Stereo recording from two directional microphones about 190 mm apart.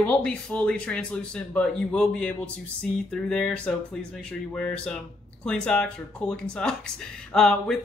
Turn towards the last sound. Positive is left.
turn(degrees=5)  # may be behind; listen again after turning